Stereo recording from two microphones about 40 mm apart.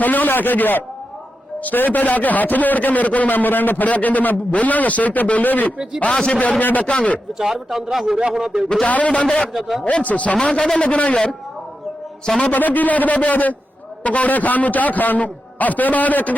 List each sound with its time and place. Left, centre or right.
0.0 s a man's voice: left
6.9 s a man's voice: left
7.3 s speech: centre
8.0 s speech: centre
8.9 s a man's voice: left
9.5 s speech: centre
9.8 s a man's voice: left
10.3 s a man's voice: left
11.1 s a man's voice: left
12.5 s a man's voice: left